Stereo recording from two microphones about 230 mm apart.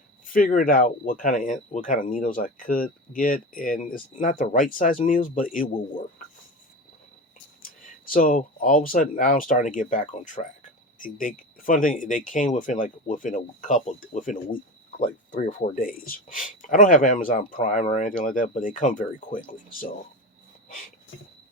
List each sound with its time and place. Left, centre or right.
0.3 s speech: left
7.6 s speech: left